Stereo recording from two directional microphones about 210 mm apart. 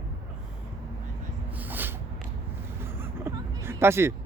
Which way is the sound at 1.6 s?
10° right (ahead or behind).